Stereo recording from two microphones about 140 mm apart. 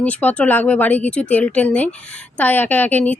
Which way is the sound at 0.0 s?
10° left (ahead or behind).